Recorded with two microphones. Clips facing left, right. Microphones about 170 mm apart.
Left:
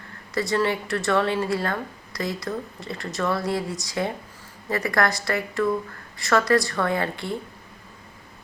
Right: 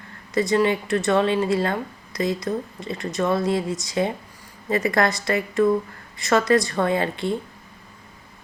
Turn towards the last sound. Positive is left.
turn(degrees=-20)  # may be behind; listen again after turning